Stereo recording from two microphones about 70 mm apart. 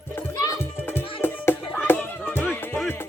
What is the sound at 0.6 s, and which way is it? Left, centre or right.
Music, left.